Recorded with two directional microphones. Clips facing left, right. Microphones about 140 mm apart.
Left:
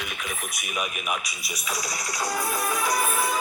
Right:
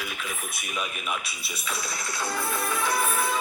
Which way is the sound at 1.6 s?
20° left (ahead or behind).